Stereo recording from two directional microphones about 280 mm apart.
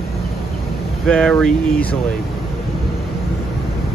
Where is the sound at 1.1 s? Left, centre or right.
Centre.